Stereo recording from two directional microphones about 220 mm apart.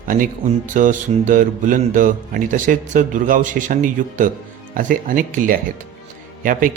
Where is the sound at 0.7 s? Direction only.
35° right (ahead or behind).